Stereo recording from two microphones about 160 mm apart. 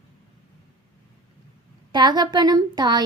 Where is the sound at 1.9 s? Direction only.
25° right (ahead or behind).